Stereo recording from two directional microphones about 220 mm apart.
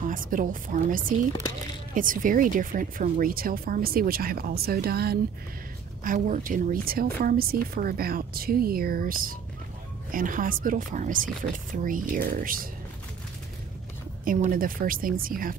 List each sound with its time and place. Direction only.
0.0 s speech: 35° right (ahead or behind)
14.2 s speech: 40° right (ahead or behind)